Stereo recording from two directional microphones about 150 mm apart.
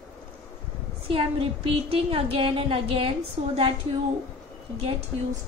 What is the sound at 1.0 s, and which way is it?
A woman's voice, 35° right (ahead or behind).